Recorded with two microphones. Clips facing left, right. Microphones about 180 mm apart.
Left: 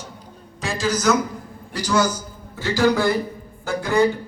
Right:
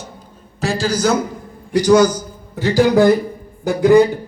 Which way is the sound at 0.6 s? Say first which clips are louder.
Right 4 dB; 35° right (ahead or behind).